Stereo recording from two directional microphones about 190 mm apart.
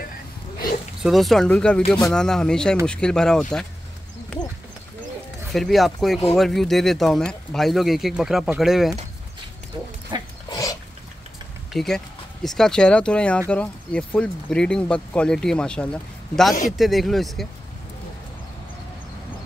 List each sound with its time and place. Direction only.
1.0 s speech: centre (ahead or behind)
5.5 s speech: centre (ahead or behind)
9.8 s dog: 20° right (ahead or behind)
10.5 s a sound: 20° left (ahead or behind)
11.7 s speech: centre (ahead or behind)